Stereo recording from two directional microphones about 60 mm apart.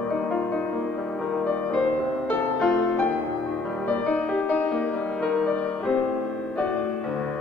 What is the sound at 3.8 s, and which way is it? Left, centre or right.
Music, left.